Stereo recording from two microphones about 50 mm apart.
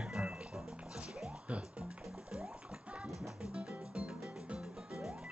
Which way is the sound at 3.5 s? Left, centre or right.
Right.